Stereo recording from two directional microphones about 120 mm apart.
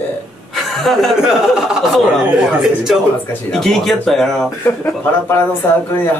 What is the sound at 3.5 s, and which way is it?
Speech, 5° left (ahead or behind).